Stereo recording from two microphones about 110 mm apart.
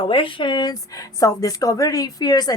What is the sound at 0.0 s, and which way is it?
A woman's voice, 50° left (ahead or behind).